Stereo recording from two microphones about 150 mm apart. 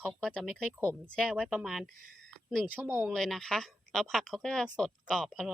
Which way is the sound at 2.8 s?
15° right (ahead or behind).